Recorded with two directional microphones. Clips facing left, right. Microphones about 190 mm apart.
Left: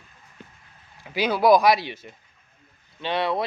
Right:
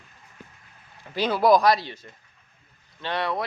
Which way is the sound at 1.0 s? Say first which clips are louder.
Left 1 dB; 5° left (ahead or behind).